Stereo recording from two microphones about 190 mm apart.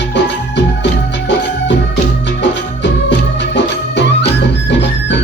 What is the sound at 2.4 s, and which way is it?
Music, 65° left (ahead or behind).